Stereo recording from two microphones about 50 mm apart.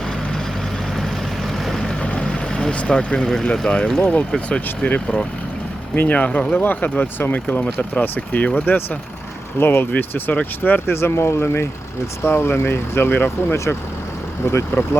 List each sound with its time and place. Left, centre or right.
1.6 s boat: centre
2.0 s speech: centre
4.4 s speech: left
9.6 s speech: left
10.9 s speech: left
14.4 s speech: left